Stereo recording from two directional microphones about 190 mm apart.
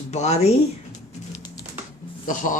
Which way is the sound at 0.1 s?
35° left (ahead or behind).